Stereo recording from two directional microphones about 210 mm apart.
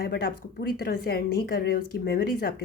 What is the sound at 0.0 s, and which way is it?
Speech, 45° left (ahead or behind).